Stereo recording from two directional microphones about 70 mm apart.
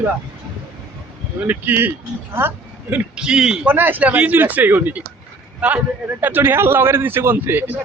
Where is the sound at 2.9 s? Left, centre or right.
Centre.